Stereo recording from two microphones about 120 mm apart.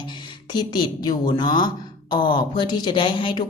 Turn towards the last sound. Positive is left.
turn(degrees=40)  # may be behind; listen again after turning